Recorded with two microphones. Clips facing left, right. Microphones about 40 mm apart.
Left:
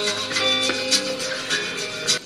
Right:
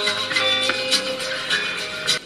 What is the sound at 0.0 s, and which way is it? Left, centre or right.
Music, right.